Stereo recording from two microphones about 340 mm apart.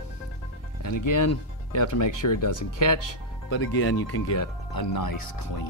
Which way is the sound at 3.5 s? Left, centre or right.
Left.